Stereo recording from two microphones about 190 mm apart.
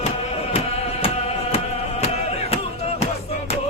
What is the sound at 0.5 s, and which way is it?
Music, 30° left (ahead or behind).